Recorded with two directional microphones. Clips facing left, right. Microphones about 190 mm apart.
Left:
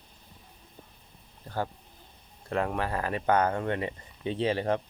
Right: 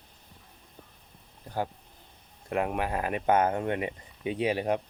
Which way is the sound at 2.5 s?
15° right (ahead or behind).